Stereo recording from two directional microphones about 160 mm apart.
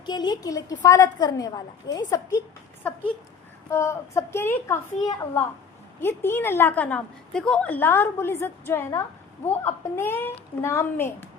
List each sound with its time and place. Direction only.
0.0 s a woman's voice: 25° left (ahead or behind)
2.8 s a woman's voice: 10° left (ahead or behind)